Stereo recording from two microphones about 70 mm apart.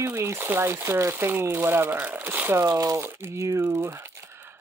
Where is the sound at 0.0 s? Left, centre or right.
Right.